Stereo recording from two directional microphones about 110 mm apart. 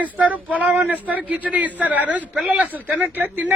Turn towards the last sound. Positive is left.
turn(degrees=-15)  # may be behind; listen again after turning